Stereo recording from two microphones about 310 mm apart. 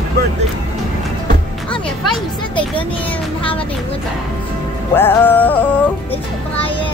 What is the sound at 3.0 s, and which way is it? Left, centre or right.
Music, centre.